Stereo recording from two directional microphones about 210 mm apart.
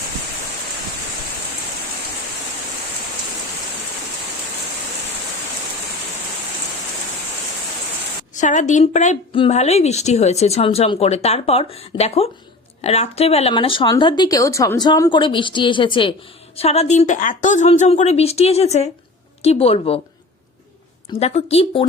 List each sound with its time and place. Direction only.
8.4 s a woman's voice: 35° left (ahead or behind)
21.1 s speech: 30° left (ahead or behind)